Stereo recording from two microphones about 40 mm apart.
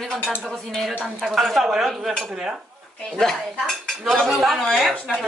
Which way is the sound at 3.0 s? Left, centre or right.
Centre.